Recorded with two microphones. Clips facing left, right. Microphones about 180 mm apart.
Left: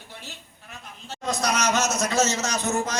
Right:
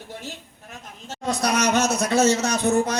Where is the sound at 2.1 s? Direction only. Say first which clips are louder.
Right 5 dB; 60° right (ahead or behind).